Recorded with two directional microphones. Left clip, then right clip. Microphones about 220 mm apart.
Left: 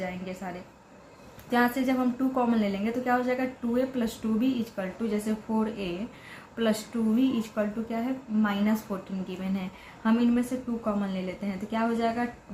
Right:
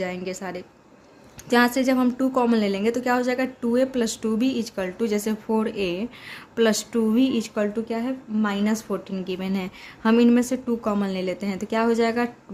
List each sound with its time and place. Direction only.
0.0 s a woman's voice: 50° right (ahead or behind)